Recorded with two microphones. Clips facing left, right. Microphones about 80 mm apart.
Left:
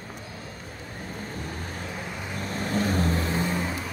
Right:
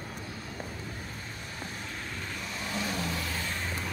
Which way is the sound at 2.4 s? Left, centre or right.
Left.